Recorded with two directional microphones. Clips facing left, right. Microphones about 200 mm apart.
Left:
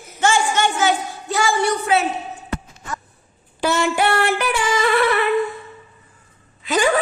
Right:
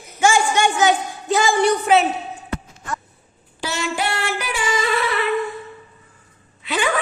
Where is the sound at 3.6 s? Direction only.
55° left (ahead or behind).